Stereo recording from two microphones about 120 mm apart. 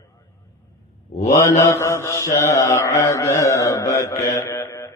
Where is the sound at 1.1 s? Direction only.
65° left (ahead or behind).